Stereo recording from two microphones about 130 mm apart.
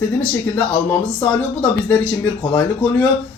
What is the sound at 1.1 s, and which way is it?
Speech, 10° left (ahead or behind).